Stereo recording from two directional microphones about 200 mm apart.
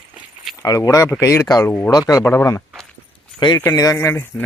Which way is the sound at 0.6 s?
15° left (ahead or behind).